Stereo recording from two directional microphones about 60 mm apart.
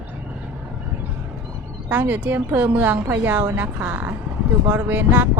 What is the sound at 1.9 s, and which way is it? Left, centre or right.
A woman's voice, right.